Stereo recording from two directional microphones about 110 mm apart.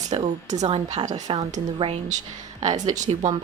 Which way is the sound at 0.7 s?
60° right (ahead or behind).